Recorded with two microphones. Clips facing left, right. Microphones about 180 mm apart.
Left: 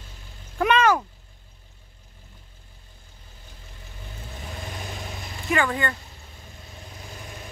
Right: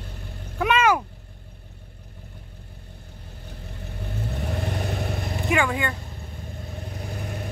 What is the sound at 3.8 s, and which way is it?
Vehicle, 60° right (ahead or behind).